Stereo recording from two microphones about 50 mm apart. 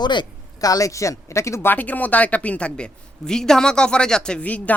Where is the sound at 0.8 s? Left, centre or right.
Left.